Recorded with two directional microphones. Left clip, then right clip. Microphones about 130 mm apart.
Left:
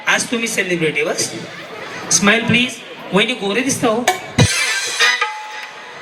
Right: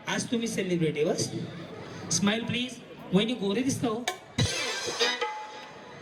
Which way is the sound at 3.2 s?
30° left (ahead or behind).